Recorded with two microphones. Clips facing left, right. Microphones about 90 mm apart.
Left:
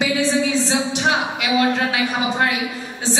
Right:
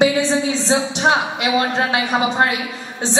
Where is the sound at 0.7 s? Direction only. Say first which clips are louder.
Right 3 dB; 30° right (ahead or behind).